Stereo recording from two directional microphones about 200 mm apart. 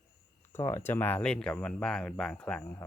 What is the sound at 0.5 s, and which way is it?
Speech, 10° left (ahead or behind).